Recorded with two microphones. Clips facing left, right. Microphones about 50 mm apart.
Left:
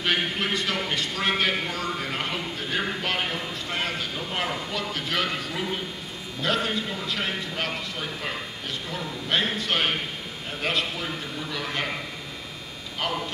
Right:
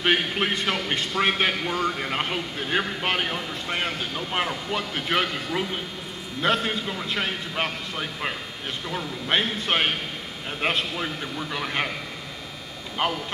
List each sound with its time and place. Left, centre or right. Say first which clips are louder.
0.0 s speech: right 3 dB; right
8.9 s speech: right 2 dB; right
13.0 s speech: right 3 dB; right